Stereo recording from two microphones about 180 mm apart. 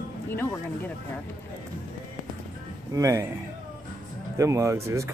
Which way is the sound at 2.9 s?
20° right (ahead or behind).